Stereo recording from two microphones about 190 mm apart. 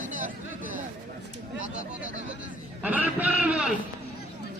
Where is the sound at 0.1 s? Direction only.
45° right (ahead or behind).